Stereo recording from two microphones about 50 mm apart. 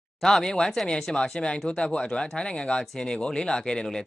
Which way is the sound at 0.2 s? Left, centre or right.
Centre.